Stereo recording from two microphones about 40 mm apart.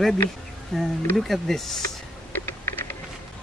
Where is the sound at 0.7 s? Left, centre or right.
Centre.